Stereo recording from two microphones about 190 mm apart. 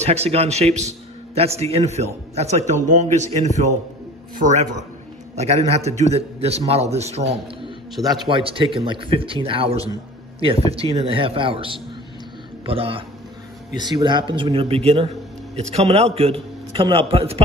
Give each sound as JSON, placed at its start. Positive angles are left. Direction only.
{"t": 0.0, "sound": "a man's voice", "side_deg": -35}